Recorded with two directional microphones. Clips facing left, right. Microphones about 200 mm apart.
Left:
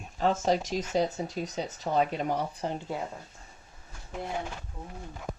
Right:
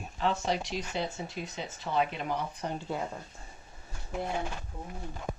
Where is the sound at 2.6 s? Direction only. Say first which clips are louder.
Left 3 dB; 30° left (ahead or behind).